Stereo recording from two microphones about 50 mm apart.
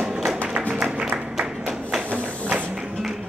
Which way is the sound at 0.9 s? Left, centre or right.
Right.